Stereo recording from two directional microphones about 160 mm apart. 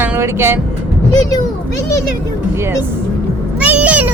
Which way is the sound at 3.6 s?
10° right (ahead or behind).